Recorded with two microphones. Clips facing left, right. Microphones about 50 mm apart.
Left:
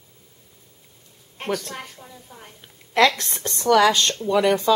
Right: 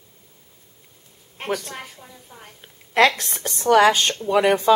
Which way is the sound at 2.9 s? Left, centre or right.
Right.